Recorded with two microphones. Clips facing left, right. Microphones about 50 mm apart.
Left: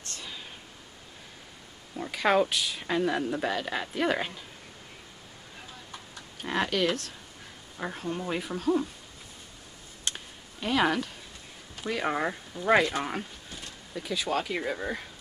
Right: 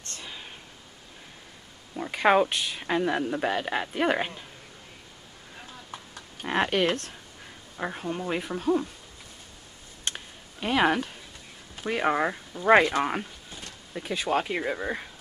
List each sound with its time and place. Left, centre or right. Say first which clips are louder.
0.2 s a sound: right 1 dB; centre
2.0 s speech: right 3 dB; right
2.8 s speech: right 2 dB; centre
6.4 s speech: right 3 dB; right
7.7 s speech: right 2 dB; centre
10.0 s a sound: right 1 dB; centre
11.7 s speech: right 4 dB; right
12.6 s speech: right 4 dB; right